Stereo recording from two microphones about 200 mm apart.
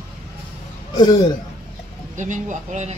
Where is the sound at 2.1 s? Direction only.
40° right (ahead or behind).